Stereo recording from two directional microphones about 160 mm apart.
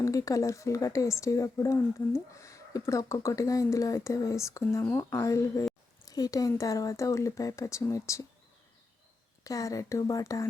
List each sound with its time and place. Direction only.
0.0 s speech: 20° left (ahead or behind)
9.4 s speech: 20° left (ahead or behind)